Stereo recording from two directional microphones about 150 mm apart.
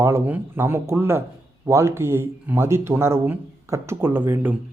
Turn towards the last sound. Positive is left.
turn(degrees=-15)  # may be behind; listen again after turning